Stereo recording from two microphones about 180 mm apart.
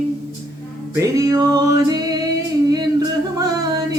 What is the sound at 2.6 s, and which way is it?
Singing, 20° right (ahead or behind).